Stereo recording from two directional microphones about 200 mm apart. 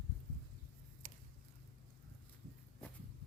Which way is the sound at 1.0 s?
40° right (ahead or behind).